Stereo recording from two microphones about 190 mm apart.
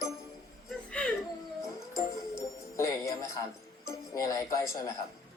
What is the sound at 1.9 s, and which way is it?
Music, 15° left (ahead or behind).